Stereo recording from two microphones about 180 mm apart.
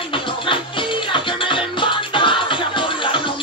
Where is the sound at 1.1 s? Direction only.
30° left (ahead or behind).